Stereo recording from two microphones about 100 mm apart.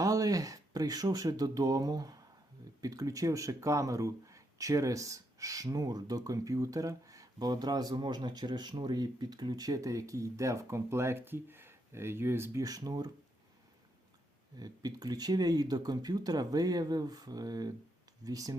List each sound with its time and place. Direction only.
0.0 s speech: 35° right (ahead or behind)
12.6 s speech: 40° right (ahead or behind)
14.6 s speech: 40° right (ahead or behind)